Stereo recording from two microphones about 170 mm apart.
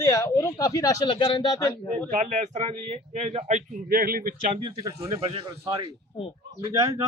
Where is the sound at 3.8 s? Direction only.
60° right (ahead or behind).